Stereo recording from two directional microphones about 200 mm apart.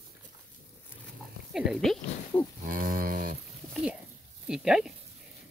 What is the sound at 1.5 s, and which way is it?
Dog, centre (ahead or behind).